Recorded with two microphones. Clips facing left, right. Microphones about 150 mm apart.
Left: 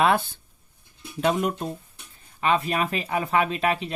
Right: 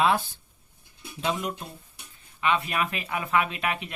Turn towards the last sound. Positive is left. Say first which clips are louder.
# left 5 dB
turn(degrees=35)  # may be behind; listen again after turning